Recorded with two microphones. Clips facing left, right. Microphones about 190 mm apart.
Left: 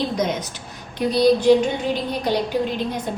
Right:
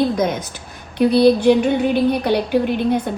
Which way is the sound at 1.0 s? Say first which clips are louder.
Right 4 dB; 60° right (ahead or behind).